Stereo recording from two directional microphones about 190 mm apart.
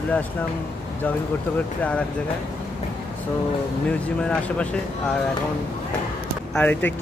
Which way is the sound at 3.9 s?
5° left (ahead or behind).